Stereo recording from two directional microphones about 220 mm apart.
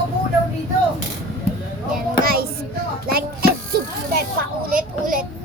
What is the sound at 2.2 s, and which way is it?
Child singing, 45° right (ahead or behind).